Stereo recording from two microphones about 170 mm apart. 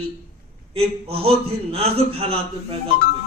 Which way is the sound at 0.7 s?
35° right (ahead or behind).